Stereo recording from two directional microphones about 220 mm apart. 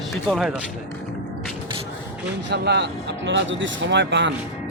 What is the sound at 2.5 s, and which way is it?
Speech, 50° right (ahead or behind).